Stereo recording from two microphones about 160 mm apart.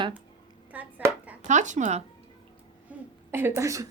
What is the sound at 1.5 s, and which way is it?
Speech, 50° right (ahead or behind).